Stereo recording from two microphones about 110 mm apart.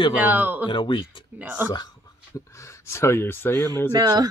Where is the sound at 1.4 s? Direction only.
15° right (ahead or behind).